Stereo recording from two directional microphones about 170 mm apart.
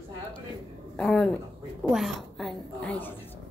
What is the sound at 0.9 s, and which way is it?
A woman's voice, 5° left (ahead or behind).